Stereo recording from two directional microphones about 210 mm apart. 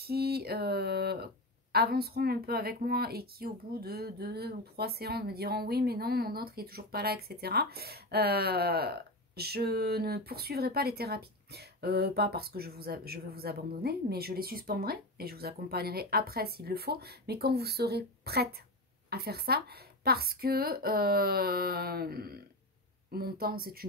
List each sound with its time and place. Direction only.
0.0 s speech: 50° right (ahead or behind)